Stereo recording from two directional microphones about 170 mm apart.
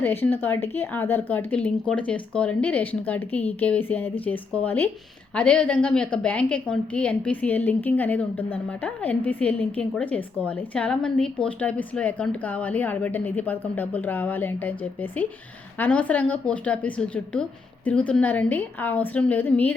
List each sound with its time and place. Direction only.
0.0 s a woman's voice: 10° left (ahead or behind)